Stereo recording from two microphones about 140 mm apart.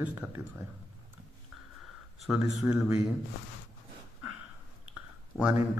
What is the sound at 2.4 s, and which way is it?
Speech, 25° right (ahead or behind).